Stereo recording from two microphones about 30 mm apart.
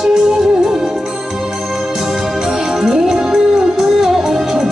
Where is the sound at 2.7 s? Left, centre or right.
Centre.